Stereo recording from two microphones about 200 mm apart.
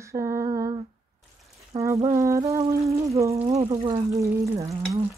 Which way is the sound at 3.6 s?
20° right (ahead or behind).